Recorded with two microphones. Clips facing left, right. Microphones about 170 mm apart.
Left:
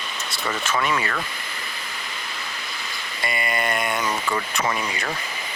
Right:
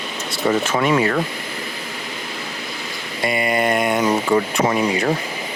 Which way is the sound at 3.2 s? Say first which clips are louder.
Right 7 dB; 10° right (ahead or behind).